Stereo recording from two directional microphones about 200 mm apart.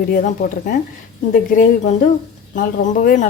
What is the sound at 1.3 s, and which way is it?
Speech, 45° left (ahead or behind).